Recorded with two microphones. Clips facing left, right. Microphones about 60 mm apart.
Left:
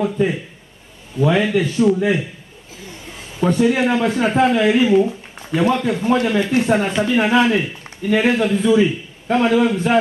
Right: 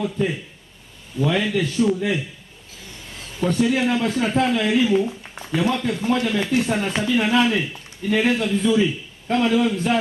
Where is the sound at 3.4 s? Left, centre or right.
Left.